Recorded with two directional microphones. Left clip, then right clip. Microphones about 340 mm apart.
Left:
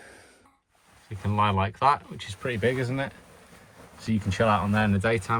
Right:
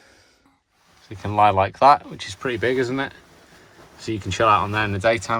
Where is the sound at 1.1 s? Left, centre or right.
Centre.